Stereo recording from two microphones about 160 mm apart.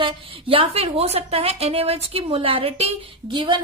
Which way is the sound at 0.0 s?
35° right (ahead or behind).